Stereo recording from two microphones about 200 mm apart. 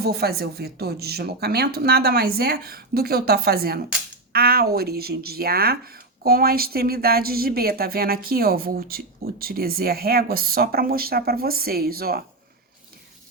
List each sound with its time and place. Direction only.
0.0 s a woman's voice: 50° right (ahead or behind)